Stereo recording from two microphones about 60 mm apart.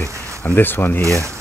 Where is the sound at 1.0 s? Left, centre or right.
Right.